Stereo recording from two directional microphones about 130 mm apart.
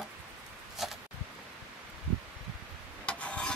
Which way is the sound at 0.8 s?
Centre (ahead or behind).